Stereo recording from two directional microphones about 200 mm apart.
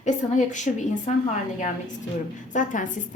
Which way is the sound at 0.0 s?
35° left (ahead or behind).